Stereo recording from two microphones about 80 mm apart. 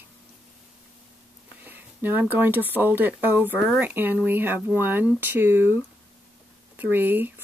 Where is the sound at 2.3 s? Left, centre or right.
Right.